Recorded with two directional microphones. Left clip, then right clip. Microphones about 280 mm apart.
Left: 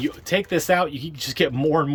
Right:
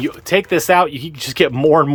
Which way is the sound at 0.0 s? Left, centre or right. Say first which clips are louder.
Right 6 dB; centre.